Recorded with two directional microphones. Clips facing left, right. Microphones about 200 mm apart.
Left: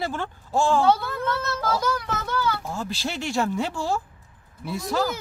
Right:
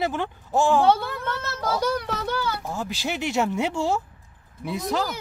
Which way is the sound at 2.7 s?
15° right (ahead or behind).